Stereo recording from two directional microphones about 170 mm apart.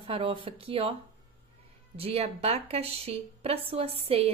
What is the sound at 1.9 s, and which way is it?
A woman's voice, 35° right (ahead or behind).